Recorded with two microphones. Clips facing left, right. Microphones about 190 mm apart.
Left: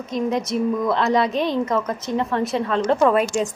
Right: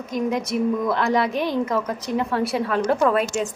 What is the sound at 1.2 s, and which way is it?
Speech, 25° left (ahead or behind).